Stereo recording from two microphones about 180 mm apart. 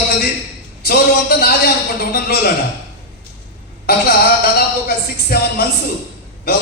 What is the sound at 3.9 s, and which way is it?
A man's voice, 55° left (ahead or behind).